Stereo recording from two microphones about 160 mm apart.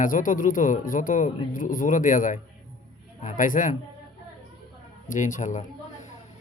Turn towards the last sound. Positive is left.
turn(degrees=50)  # may be behind; listen again after turning